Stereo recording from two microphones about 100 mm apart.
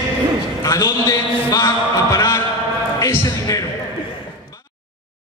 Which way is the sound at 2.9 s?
35° left (ahead or behind).